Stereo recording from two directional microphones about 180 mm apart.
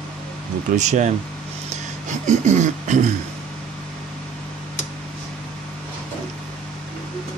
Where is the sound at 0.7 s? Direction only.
40° right (ahead or behind).